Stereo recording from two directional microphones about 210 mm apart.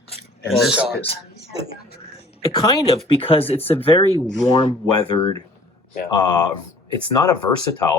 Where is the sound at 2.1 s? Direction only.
25° left (ahead or behind).